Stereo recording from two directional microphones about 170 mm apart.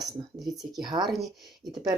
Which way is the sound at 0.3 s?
Centre (ahead or behind).